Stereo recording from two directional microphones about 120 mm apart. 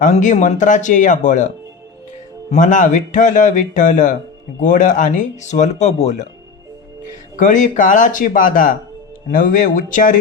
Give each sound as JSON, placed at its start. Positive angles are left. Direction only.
{"t": 0.0, "sound": "speech", "side_deg": 90}
{"t": 7.3, "sound": "speech", "side_deg": 90}